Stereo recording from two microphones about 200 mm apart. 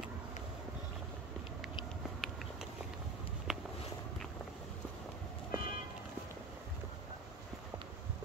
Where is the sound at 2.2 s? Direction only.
Centre (ahead or behind).